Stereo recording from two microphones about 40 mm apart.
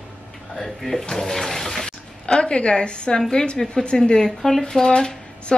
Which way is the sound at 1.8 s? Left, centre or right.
Left.